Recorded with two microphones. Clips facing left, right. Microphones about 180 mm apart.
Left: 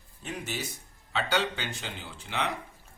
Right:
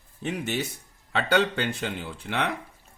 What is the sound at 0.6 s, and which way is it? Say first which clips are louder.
Speech: right 1 dB; 60° right (ahead or behind).